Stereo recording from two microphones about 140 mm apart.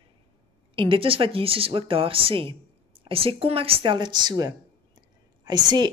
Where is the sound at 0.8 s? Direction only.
40° right (ahead or behind).